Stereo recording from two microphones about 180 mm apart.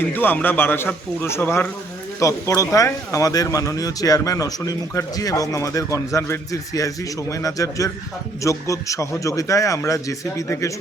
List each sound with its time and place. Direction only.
0.1 s speech: 10° left (ahead or behind)